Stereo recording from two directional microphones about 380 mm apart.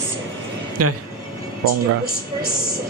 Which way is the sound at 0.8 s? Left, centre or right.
Right.